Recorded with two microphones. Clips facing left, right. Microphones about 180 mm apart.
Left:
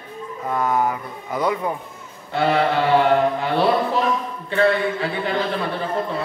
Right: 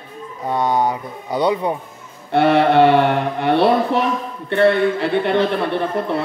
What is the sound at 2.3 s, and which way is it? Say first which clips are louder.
A man's voice: right 6 dB; 65° right (ahead or behind).